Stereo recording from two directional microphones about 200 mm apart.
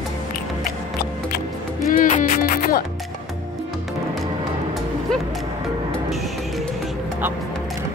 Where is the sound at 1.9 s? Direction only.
40° left (ahead or behind).